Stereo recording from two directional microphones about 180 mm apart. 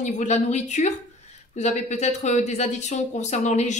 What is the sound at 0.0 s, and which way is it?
Speech, 40° left (ahead or behind).